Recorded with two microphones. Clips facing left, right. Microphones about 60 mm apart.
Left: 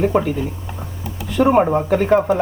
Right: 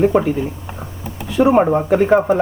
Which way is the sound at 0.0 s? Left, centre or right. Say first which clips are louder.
Right 3 dB; centre.